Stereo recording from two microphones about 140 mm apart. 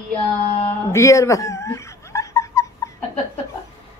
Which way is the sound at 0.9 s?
20° left (ahead or behind).